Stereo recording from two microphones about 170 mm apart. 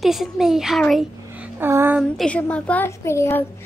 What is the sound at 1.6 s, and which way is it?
Speech, 15° right (ahead or behind).